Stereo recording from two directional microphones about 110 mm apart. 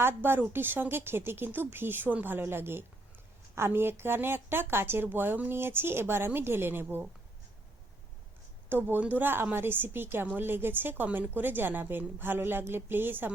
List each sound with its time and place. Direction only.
0.0 s a woman's voice: 20° right (ahead or behind)
8.7 s a woman's voice: 15° right (ahead or behind)